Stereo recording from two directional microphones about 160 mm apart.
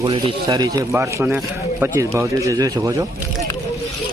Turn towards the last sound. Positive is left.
turn(degrees=-20)  # may be behind; listen again after turning